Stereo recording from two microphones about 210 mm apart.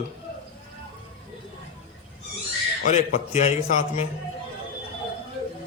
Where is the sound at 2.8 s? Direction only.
35° left (ahead or behind).